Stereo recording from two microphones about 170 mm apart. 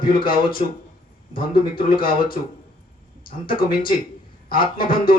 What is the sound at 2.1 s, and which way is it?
Speech, 60° left (ahead or behind).